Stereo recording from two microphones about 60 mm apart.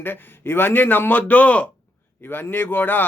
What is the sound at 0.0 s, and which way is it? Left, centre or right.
A man's voice, left.